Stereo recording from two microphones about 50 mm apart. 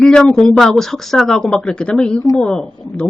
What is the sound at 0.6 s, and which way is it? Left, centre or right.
Speech, centre.